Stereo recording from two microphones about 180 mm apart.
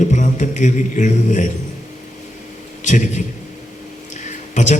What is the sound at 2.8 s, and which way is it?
Speech, 40° left (ahead or behind).